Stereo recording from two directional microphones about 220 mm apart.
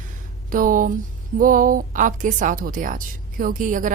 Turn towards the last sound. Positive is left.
turn(degrees=-35)  # may be behind; listen again after turning